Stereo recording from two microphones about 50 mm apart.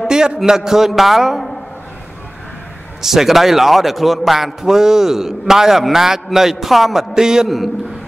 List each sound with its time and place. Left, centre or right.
0.5 s a man's voice: centre
3.0 s a man's voice: centre
7.4 s a man's voice: centre